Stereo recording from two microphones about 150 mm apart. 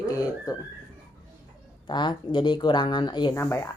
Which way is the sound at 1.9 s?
30° left (ahead or behind).